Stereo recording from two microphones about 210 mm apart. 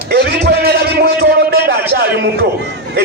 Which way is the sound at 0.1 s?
50° right (ahead or behind).